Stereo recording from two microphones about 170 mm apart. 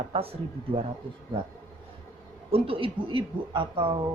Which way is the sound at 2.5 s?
30° right (ahead or behind).